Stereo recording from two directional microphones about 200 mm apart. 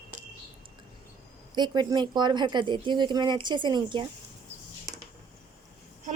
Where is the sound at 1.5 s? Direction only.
20° right (ahead or behind).